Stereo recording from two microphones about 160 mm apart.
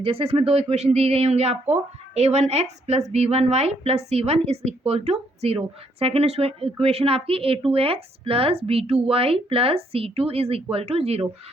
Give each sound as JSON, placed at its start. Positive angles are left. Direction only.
{"t": 0.0, "sound": "a woman's voice", "side_deg": -35}